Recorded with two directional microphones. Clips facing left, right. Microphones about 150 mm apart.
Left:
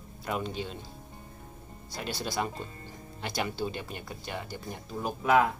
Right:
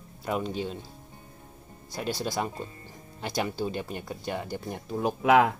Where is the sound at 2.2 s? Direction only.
15° right (ahead or behind).